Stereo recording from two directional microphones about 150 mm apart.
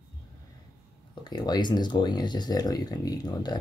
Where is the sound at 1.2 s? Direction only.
30° left (ahead or behind).